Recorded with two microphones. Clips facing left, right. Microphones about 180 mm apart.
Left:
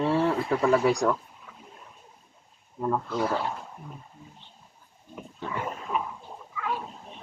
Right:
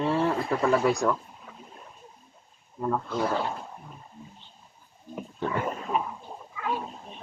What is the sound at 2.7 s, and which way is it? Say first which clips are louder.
Speech: left 1 dB; 5° left (ahead or behind).